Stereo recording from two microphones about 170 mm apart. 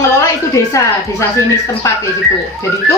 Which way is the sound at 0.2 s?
20° left (ahead or behind).